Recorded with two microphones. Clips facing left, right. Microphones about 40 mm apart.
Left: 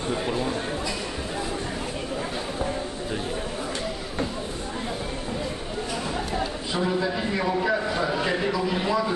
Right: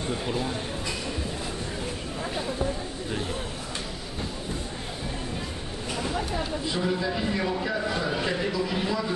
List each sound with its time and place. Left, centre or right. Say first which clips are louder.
0.1 s a man's voice: left 3 dB; centre
6.7 s a man's voice: left 3 dB; centre